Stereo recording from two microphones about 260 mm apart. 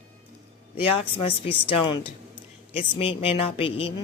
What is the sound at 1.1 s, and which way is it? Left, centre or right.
Speech, left.